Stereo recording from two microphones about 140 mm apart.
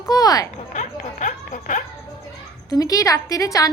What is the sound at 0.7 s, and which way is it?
Music, 65° left (ahead or behind).